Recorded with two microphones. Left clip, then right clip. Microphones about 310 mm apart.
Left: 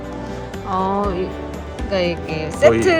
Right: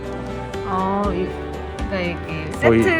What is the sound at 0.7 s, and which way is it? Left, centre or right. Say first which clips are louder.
Speech: left 2 dB; centre.